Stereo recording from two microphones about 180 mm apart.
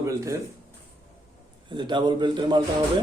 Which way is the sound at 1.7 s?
25° right (ahead or behind).